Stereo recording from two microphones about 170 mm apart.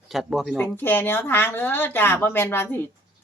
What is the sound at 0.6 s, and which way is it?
A woman's voice, 10° left (ahead or behind).